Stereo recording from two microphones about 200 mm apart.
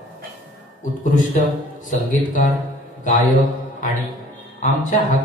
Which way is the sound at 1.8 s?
40° left (ahead or behind).